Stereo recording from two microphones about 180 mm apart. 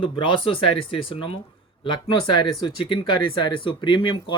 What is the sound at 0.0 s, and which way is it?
Speech, 30° left (ahead or behind).